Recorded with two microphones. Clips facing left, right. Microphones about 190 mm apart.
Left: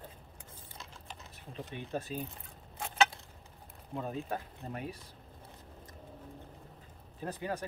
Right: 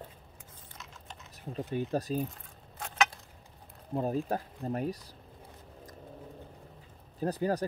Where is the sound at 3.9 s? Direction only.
40° right (ahead or behind).